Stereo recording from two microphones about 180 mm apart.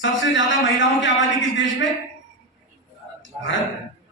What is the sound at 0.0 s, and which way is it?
A man's voice, 90° left.